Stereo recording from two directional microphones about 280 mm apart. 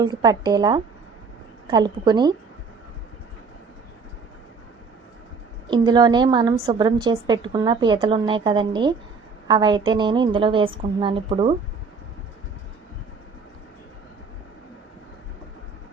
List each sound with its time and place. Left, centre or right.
0.0 s a woman's voice: centre
5.7 s a woman's voice: centre